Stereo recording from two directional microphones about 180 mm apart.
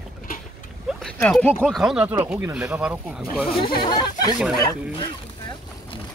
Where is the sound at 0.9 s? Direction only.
Centre (ahead or behind).